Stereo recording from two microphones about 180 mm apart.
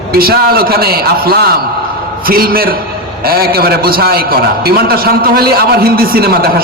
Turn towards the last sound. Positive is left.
turn(degrees=-55)  # may be behind; listen again after turning